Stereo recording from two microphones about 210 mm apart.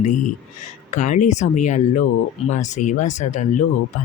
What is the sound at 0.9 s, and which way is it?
Speech, 35° left (ahead or behind).